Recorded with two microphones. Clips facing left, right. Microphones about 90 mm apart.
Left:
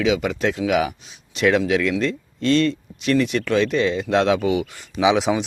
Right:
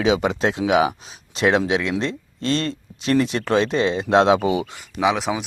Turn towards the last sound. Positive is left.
turn(degrees=0)  # may be behind; listen again after turning